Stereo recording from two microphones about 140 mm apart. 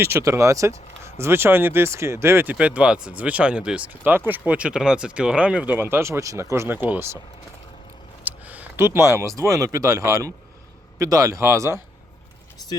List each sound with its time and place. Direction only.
0.0 s speech: 20° right (ahead or behind)
8.2 s a man's voice: 10° right (ahead or behind)